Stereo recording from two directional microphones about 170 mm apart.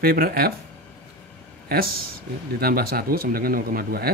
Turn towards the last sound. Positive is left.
turn(degrees=-60)  # may be behind; listen again after turning